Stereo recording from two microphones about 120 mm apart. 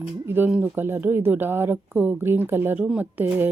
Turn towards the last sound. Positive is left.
turn(degrees=-15)  # may be behind; listen again after turning